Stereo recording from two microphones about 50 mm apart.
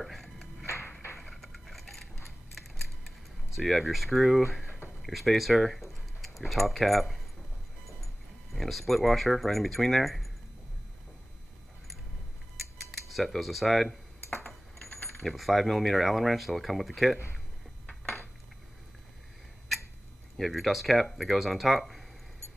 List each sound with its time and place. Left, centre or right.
0.0 s music: centre
1.1 s a sound: centre
2.5 s typing: centre
3.5 s speech: centre
8.5 s speech: centre
13.1 s speech: centre
13.8 s computer keyboard: left
15.2 s speech: centre
20.3 s speech: centre